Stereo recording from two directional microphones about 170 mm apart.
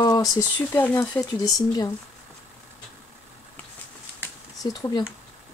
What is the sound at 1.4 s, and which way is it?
Speech, 20° left (ahead or behind).